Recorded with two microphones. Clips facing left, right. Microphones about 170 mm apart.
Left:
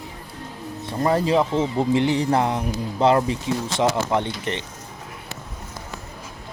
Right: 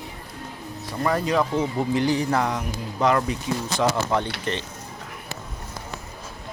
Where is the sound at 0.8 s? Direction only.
25° left (ahead or behind).